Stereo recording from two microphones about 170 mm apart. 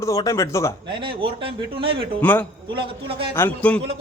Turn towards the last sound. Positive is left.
turn(degrees=10)  # may be behind; listen again after turning